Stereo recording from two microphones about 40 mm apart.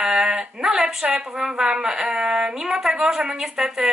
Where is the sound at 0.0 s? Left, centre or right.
Centre.